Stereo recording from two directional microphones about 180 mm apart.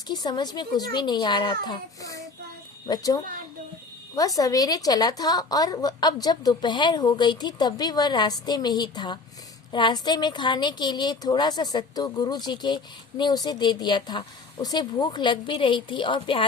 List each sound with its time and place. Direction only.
0.1 s a woman's voice: 25° left (ahead or behind)